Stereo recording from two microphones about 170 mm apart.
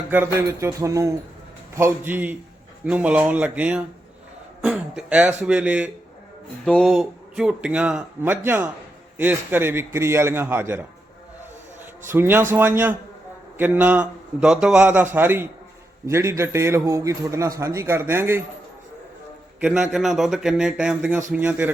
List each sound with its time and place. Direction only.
0.1 s speech: 15° right (ahead or behind)
6.7 s a man's voice: 5° left (ahead or behind); by 18.4 s 15° right (ahead or behind)
19.5 s a man's voice: 5° right (ahead or behind)